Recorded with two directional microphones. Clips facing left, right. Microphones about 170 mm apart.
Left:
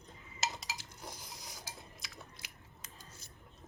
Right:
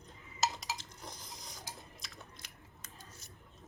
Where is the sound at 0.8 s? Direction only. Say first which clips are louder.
Left 1 dB; 10° left (ahead or behind).